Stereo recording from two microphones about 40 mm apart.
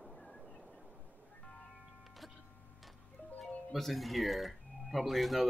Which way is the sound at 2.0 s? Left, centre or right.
Centre.